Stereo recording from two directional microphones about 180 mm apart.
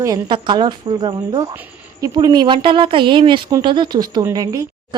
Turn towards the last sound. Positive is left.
turn(degrees=-20)  # may be behind; listen again after turning